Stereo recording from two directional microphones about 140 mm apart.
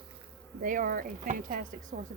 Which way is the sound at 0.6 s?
75° right (ahead or behind).